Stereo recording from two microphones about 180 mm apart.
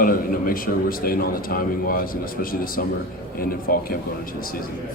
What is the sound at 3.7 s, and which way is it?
Speech, 55° left (ahead or behind).